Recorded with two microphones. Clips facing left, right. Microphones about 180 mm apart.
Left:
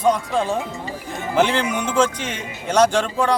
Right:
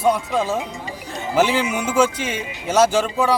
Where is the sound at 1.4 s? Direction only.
5° right (ahead or behind).